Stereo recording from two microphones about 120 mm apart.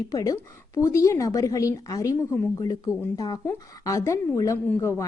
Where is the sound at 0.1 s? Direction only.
30° left (ahead or behind).